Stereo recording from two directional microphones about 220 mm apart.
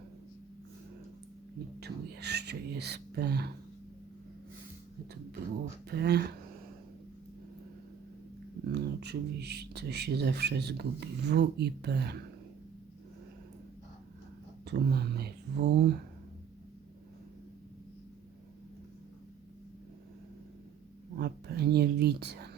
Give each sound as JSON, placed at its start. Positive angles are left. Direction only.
{"t": 1.8, "sound": "speech", "side_deg": -50}
{"t": 5.9, "sound": "speech", "side_deg": -45}
{"t": 8.6, "sound": "speech", "side_deg": -50}
{"t": 14.6, "sound": "speech", "side_deg": -45}
{"t": 21.2, "sound": "speech", "side_deg": -50}